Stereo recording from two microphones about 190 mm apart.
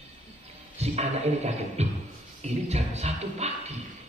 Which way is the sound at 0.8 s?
35° right (ahead or behind).